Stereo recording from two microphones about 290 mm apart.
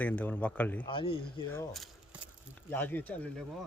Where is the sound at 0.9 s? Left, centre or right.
Centre.